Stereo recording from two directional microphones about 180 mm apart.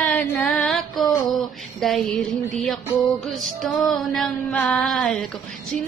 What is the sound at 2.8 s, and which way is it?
Music, 20° left (ahead or behind).